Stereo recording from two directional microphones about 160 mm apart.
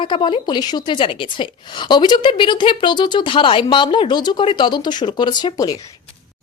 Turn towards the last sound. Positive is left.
turn(degrees=25)  # may be behind; listen again after turning